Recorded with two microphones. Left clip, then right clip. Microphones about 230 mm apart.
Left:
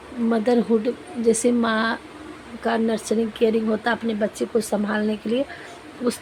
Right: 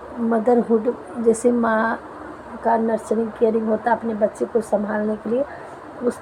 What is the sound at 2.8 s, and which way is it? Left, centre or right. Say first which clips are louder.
Speech: right 2 dB; left.